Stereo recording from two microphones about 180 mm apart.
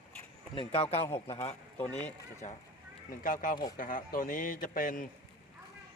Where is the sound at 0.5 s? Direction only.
30° left (ahead or behind).